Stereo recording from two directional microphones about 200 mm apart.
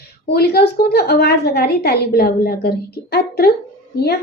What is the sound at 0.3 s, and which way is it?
A woman's voice, 50° left (ahead or behind).